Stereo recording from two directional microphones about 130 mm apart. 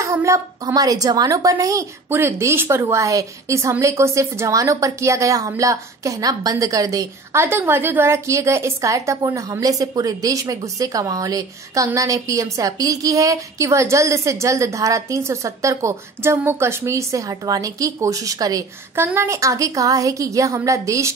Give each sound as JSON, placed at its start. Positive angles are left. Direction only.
{"t": 0.0, "sound": "a woman's voice", "side_deg": -25}